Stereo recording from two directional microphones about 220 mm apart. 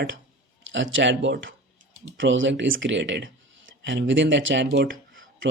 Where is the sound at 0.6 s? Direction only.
60° right (ahead or behind).